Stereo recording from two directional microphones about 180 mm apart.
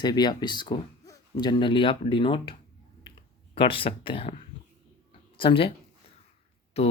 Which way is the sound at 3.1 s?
30° left (ahead or behind).